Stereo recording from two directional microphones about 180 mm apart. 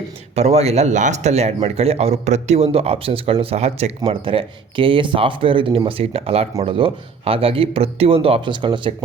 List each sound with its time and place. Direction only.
0.3 s speech: 35° right (ahead or behind)